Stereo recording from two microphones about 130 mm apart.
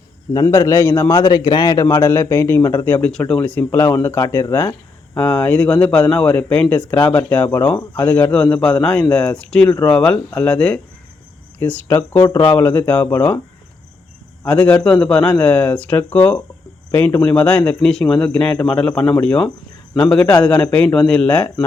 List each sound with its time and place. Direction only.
0.4 s a man's voice: 20° left (ahead or behind)
14.4 s speech: 10° left (ahead or behind)